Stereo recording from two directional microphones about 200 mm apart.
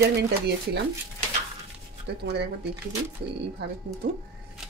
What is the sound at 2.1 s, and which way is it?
Speech, 55° right (ahead or behind).